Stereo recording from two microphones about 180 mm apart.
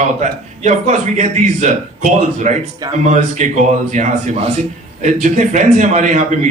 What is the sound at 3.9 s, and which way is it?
A man's voice, 40° right (ahead or behind).